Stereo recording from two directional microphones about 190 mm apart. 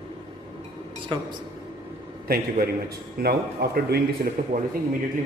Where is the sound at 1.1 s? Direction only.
25° right (ahead or behind).